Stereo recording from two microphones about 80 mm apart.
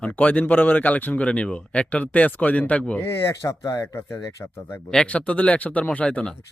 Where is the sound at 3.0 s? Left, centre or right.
Left.